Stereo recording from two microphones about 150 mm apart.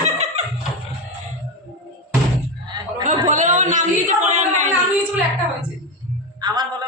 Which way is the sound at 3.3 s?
55° right (ahead or behind).